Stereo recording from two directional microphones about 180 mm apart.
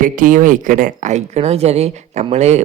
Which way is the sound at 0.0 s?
45° right (ahead or behind).